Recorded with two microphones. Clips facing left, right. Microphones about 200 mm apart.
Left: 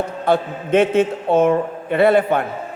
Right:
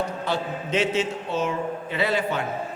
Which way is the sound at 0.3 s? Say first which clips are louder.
Left 9 dB; 55° left (ahead or behind).